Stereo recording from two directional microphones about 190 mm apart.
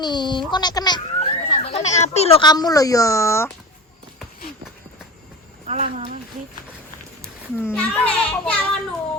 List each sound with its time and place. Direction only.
0.0 s speech: 25° left (ahead or behind)
1.2 s speech: 30° left (ahead or behind); by 3.5 s 15° left (ahead or behind)
5.6 s speech: 35° right (ahead or behind)
7.2 s a child's voice: 10° left (ahead or behind)